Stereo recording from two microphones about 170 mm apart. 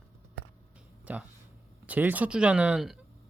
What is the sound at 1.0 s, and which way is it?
Speech, 10° right (ahead or behind).